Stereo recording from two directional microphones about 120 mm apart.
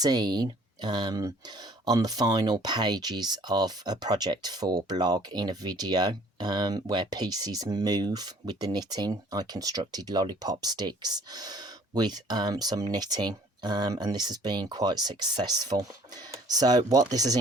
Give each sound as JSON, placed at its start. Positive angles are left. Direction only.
{"t": 0.0, "sound": "speech", "side_deg": -35}